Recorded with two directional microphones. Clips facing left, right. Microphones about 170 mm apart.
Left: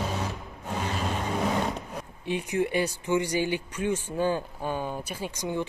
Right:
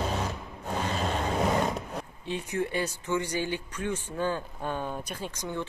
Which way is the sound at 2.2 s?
15° left (ahead or behind).